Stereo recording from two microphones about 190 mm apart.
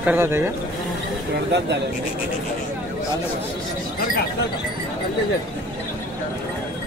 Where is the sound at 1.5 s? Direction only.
65° right (ahead or behind).